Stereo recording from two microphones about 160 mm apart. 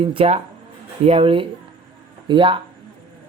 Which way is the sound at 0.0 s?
35° right (ahead or behind).